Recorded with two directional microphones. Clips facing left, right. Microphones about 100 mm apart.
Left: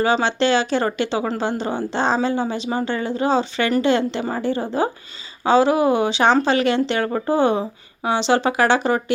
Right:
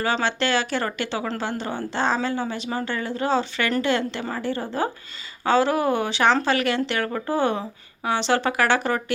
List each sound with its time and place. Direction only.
0.0 s speech: 20° left (ahead or behind)